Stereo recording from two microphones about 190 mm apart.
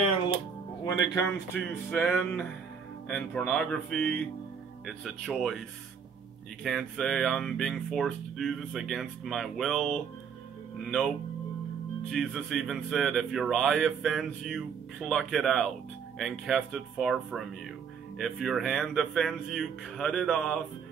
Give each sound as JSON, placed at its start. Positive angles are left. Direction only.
{"t": 0.8, "sound": "speech", "side_deg": 20}
{"t": 1.9, "sound": "music", "side_deg": 5}
{"t": 3.1, "sound": "speech", "side_deg": 5}
{"t": 6.6, "sound": "speech", "side_deg": 0}
{"t": 12.1, "sound": "speech", "side_deg": 0}